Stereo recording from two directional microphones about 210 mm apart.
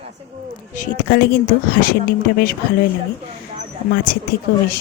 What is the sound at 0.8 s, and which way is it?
Speech, 45° left (ahead or behind).